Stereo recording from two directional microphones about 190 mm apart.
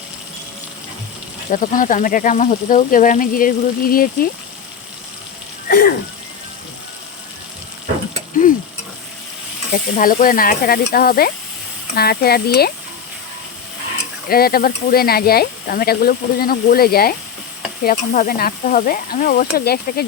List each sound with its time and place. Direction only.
1.5 s speech: 45° left (ahead or behind)
5.6 s a sound: 50° left (ahead or behind)
9.7 s speech: 45° left (ahead or behind)
14.3 s speech: 50° left (ahead or behind)